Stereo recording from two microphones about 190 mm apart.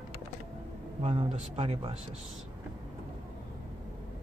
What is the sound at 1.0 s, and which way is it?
Speech, 35° right (ahead or behind).